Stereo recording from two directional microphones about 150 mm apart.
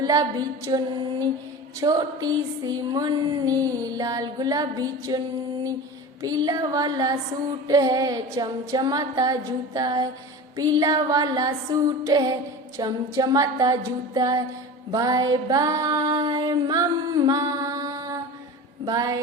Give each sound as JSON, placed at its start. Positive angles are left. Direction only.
{"t": 0.0, "sound": "music", "side_deg": -25}
{"t": 1.8, "sound": "music", "side_deg": -25}
{"t": 6.2, "sound": "music", "side_deg": -25}